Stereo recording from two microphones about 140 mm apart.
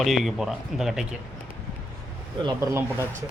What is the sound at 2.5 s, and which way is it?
Speech, 20° right (ahead or behind).